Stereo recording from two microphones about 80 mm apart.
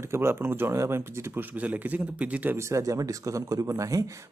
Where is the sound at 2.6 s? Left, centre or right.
Right.